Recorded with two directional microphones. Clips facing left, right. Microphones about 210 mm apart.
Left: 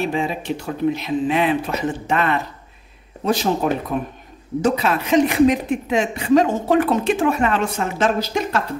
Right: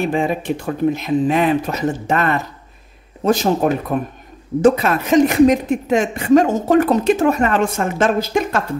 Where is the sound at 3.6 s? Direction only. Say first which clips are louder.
Right 3 dB; 50° right (ahead or behind).